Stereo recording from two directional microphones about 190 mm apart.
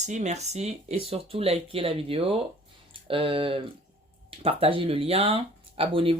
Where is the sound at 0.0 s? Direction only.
40° right (ahead or behind).